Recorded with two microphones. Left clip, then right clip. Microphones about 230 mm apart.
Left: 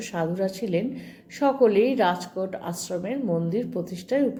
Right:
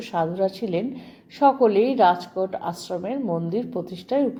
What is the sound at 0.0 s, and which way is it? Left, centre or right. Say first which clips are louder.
A woman's voice: right 4 dB; right.